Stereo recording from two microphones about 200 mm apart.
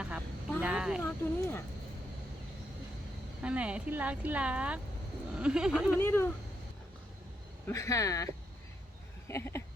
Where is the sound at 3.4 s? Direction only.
5° right (ahead or behind).